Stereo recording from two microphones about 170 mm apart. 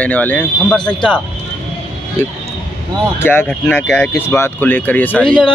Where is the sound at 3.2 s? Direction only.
10° left (ahead or behind).